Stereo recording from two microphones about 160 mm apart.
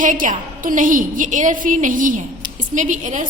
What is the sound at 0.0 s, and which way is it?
A woman's voice, 55° right (ahead or behind).